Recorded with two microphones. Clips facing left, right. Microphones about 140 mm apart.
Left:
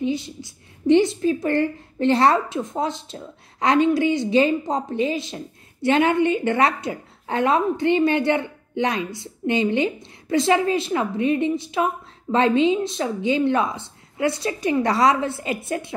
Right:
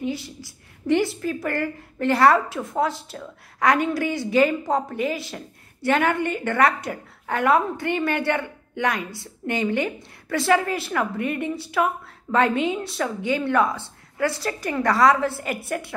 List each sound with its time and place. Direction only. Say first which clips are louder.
0.0 s a woman's voice: left 4 dB; 20° left (ahead or behind)